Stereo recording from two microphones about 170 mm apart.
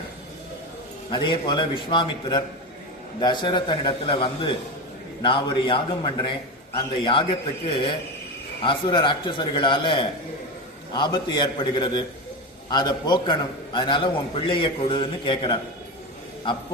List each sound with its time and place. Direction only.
1.1 s a man's voice: 25° left (ahead or behind)